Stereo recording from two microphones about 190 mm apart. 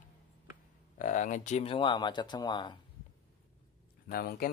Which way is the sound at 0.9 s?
45° left (ahead or behind).